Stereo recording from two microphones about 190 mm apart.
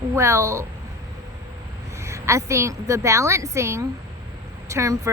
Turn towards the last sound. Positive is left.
turn(degrees=-15)  # may be behind; listen again after turning